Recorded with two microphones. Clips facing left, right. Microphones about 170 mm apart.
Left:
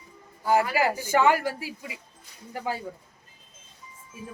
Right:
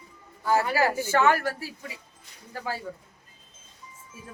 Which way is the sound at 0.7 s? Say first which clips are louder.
Even; 15° left (ahead or behind).